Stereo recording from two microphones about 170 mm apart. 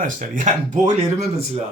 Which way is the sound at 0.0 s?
50° right (ahead or behind).